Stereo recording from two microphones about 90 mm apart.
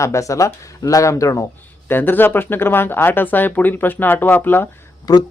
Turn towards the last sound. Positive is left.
turn(degrees=40)  # may be behind; listen again after turning